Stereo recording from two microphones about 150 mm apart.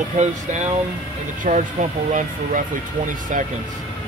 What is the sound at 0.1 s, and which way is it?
Speech, 50° right (ahead or behind).